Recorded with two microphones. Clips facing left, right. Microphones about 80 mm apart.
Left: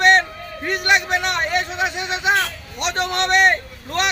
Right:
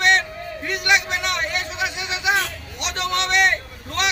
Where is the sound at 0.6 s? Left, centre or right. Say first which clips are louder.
Left 2 dB; left.